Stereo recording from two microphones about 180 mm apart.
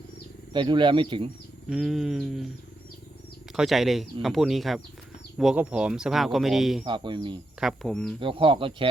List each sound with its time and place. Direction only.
0.5 s speech: 25° right (ahead or behind)
1.7 s speech: centre (ahead or behind)
3.5 s speech: centre (ahead or behind)
6.8 s speech: 25° right (ahead or behind)
7.6 s speech: centre (ahead or behind)
8.2 s speech: 30° right (ahead or behind)